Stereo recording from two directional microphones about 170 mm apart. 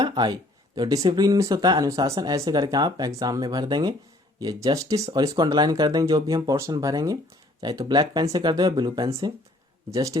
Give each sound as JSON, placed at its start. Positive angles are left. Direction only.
{"t": 0.0, "sound": "speech", "side_deg": -25}